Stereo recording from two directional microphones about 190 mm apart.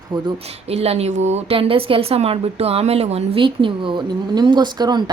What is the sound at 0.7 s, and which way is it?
Speech, 35° right (ahead or behind).